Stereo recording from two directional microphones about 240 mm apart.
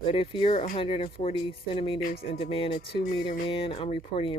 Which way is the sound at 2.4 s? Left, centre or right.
Left.